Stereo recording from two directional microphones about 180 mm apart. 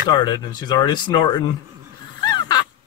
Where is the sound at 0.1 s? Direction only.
25° left (ahead or behind).